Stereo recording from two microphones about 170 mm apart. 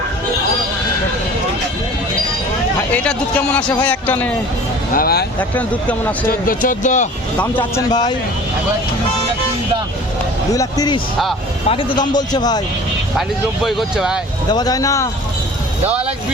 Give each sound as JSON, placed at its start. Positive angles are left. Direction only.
{"t": 2.9, "sound": "a man's voice", "side_deg": 5}
{"t": 4.9, "sound": "speech", "side_deg": 65}
{"t": 5.4, "sound": "a man's voice", "side_deg": 10}
{"t": 6.5, "sound": "speech", "side_deg": 55}
{"t": 7.5, "sound": "a man's voice", "side_deg": 25}
{"t": 10.5, "sound": "a man's voice", "side_deg": 20}
{"t": 13.7, "sound": "speech", "side_deg": 0}
{"t": 14.5, "sound": "a man's voice", "side_deg": 20}